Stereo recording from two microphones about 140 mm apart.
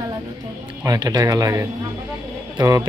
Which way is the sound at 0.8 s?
30° right (ahead or behind).